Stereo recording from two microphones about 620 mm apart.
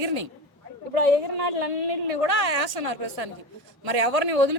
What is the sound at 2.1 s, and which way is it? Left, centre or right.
A woman's voice, right.